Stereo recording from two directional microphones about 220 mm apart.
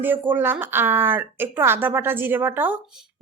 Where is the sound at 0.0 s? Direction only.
10° right (ahead or behind).